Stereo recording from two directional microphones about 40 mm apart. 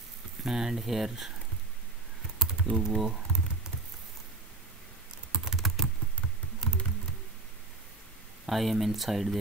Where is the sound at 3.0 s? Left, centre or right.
Centre.